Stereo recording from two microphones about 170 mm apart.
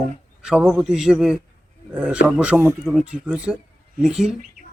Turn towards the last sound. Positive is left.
turn(degrees=-5)  # may be behind; listen again after turning